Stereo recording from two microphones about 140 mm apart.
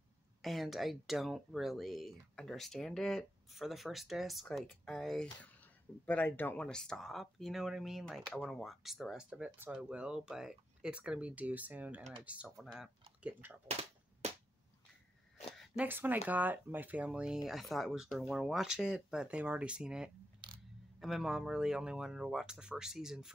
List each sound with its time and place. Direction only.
0.4 s speech: centre (ahead or behind)
13.7 s cap gun: 50° right (ahead or behind)
15.5 s a sound: 5° right (ahead or behind)
15.9 s speech: 15° right (ahead or behind)